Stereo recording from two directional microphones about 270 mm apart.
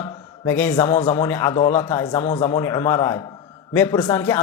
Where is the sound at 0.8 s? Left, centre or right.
Centre.